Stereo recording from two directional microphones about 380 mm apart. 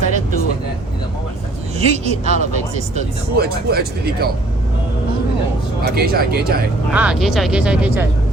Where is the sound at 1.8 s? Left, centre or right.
Centre.